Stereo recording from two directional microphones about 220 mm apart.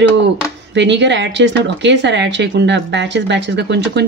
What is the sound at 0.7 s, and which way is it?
Speech, 55° right (ahead or behind).